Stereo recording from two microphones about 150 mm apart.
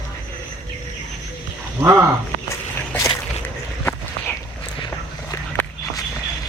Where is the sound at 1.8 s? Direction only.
15° right (ahead or behind).